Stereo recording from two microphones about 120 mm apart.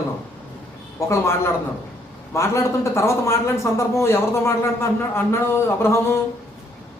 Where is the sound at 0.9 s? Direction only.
25° left (ahead or behind).